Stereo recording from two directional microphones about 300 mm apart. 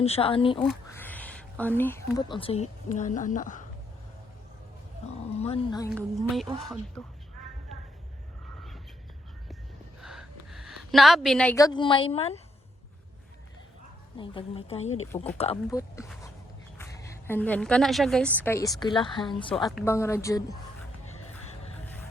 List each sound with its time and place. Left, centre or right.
0.0 s a woman's voice: centre
0.6 s speech: centre; by 3.6 s left
5.4 s speech: centre
5.9 s a woman's voice: centre
10.0 s a woman's voice: centre
14.2 s a woman's voice: centre
21.1 s music: left